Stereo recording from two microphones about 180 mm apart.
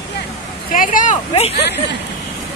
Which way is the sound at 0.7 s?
45° left (ahead or behind).